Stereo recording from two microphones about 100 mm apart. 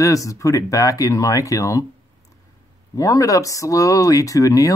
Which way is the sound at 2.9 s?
35° left (ahead or behind).